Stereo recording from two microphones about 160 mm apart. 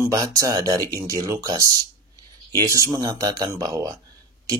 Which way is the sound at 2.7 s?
20° right (ahead or behind).